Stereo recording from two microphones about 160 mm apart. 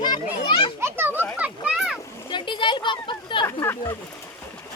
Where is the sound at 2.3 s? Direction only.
30° left (ahead or behind).